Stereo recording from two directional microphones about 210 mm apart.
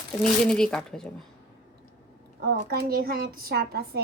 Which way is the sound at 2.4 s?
50° right (ahead or behind).